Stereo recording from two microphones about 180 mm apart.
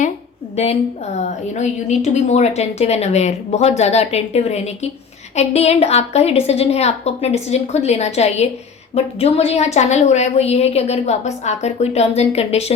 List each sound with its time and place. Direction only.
0.5 s a woman's voice: 35° left (ahead or behind)